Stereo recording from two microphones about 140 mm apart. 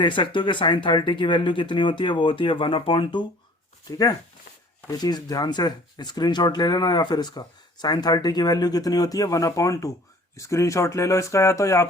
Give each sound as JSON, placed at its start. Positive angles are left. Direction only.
{"t": 0.0, "sound": "speech", "side_deg": 35}
{"t": 3.9, "sound": "speech", "side_deg": 25}